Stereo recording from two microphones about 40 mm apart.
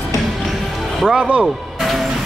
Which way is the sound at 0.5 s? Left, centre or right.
Centre.